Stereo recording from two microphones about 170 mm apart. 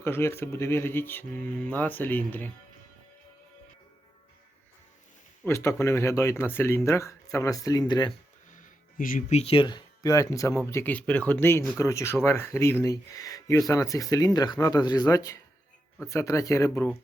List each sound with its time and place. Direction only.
0.0 s speech: 15° left (ahead or behind)
5.5 s speech: 15° left (ahead or behind)
9.0 s speech: 55° left (ahead or behind)
9.4 s speech: 30° left (ahead or behind); by 16.9 s 15° left (ahead or behind)